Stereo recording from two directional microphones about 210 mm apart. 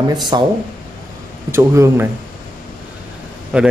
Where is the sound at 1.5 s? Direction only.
10° right (ahead or behind).